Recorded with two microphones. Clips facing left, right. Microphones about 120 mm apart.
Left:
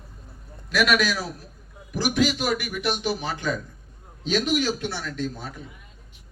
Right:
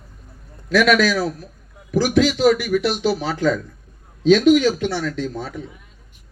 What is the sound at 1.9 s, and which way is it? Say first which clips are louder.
A man's voice: right 6 dB; 90° right.